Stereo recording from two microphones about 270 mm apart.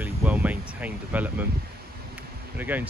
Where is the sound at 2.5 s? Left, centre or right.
Centre.